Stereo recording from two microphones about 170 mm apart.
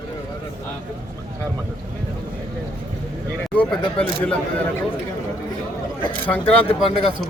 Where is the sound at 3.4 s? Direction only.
5° left (ahead or behind).